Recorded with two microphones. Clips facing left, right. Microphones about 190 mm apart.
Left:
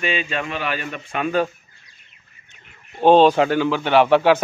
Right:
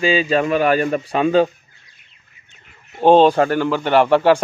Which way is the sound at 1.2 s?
25° right (ahead or behind).